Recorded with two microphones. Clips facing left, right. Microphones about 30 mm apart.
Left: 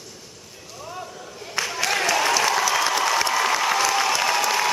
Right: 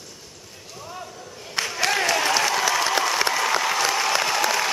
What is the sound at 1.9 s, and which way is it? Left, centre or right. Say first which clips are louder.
Applause: left 2 dB; centre.